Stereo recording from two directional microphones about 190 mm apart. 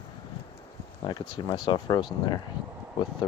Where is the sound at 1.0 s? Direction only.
20° left (ahead or behind).